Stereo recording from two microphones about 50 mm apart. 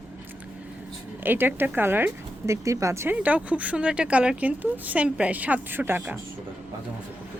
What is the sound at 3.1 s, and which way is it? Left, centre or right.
Speech, right.